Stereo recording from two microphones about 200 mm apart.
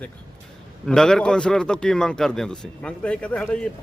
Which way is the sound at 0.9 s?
5° left (ahead or behind).